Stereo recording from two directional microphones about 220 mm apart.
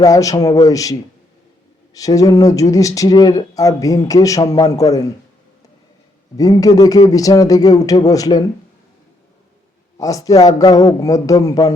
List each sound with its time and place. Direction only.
0.0 s speech: 15° left (ahead or behind)
6.3 s speech: 15° left (ahead or behind)
10.0 s speech: 15° left (ahead or behind)